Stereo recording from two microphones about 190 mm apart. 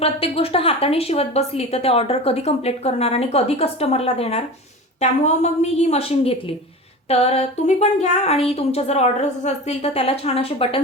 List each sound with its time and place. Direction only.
0.0 s a woman's voice: 30° left (ahead or behind)